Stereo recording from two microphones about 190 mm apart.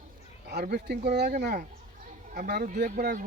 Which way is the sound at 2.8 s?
60° right (ahead or behind).